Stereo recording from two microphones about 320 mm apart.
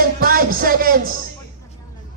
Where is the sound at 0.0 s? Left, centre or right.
Right.